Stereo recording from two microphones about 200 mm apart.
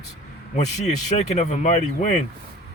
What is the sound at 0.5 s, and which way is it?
Speech, 35° left (ahead or behind).